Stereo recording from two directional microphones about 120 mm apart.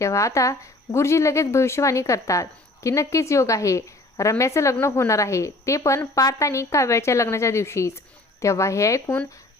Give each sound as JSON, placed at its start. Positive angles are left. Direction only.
{"t": 0.0, "sound": "a woman's voice", "side_deg": 25}